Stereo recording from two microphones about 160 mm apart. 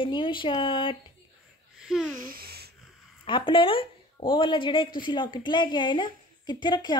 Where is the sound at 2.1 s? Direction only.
65° right (ahead or behind).